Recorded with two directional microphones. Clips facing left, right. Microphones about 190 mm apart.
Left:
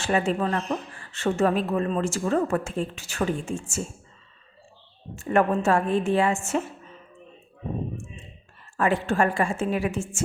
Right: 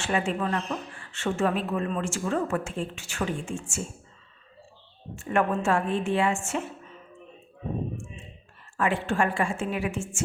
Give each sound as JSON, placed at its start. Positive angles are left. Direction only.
{"t": 0.0, "sound": "speech", "side_deg": 40}
{"t": 5.1, "sound": "speech", "side_deg": 40}
{"t": 8.8, "sound": "speech", "side_deg": 40}